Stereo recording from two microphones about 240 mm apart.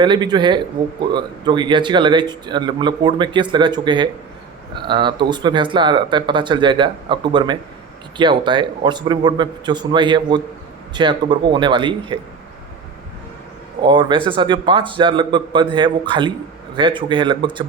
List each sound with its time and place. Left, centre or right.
0.0 s a man's voice: centre
13.8 s a man's voice: centre